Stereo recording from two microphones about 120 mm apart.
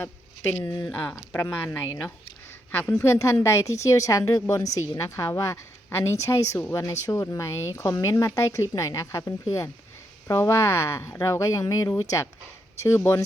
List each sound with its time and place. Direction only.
0.6 s speech: 30° left (ahead or behind)
0.9 s speech: 10° left (ahead or behind)